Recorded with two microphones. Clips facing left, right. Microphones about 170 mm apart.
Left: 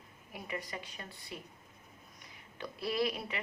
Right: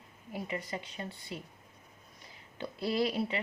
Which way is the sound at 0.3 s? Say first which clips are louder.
Right 4 dB; 30° right (ahead or behind).